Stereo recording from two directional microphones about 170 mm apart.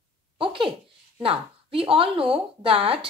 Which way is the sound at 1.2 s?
30° right (ahead or behind).